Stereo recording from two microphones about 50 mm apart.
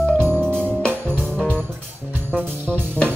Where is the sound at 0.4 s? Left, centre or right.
Right.